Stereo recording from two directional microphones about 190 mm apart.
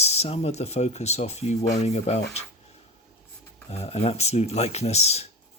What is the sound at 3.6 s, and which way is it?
Speech, 35° left (ahead or behind).